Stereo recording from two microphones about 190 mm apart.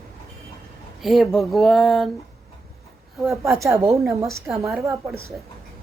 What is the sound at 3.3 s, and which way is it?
A woman's voice, 15° right (ahead or behind).